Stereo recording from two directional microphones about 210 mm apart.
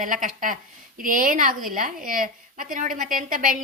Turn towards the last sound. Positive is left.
turn(degrees=-40)  # may be behind; listen again after turning